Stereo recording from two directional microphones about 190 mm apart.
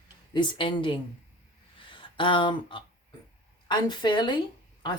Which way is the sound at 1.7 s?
25° left (ahead or behind).